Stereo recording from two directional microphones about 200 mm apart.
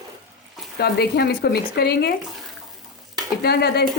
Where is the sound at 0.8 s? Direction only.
55° left (ahead or behind).